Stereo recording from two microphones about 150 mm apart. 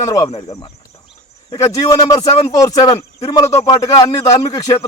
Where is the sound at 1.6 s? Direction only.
25° left (ahead or behind).